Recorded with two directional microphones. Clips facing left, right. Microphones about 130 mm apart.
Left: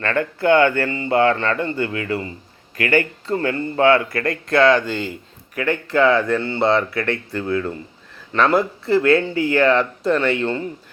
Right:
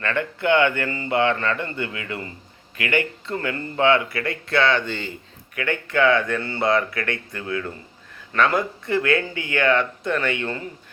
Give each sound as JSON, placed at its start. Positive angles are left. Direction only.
{"t": 0.0, "sound": "speech", "side_deg": 40}
{"t": 0.9, "sound": "speech", "side_deg": 25}
{"t": 1.1, "sound": "speech", "side_deg": 40}
{"t": 8.3, "sound": "speech", "side_deg": 30}